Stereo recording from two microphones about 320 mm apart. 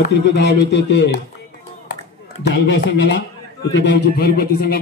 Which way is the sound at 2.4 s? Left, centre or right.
Left.